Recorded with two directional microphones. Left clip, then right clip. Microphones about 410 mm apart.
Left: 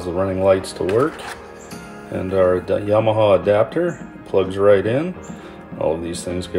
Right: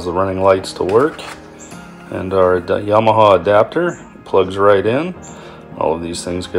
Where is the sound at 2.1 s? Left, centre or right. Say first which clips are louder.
Right 3 dB; centre.